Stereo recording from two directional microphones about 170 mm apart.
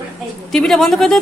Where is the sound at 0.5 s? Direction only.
Centre (ahead or behind).